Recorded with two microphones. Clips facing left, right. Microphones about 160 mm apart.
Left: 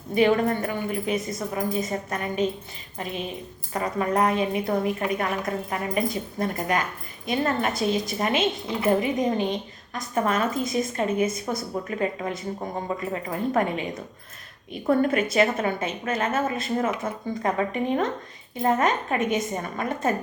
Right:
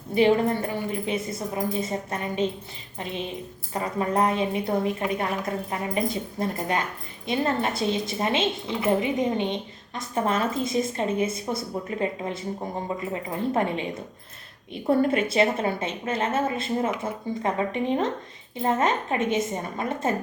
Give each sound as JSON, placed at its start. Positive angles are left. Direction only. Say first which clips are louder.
{"t": 0.1, "sound": "a woman's voice", "louder": "even", "side_deg": -30}
{"t": 3.7, "sound": "a woman's voice", "louder": "left 1 dB", "side_deg": -25}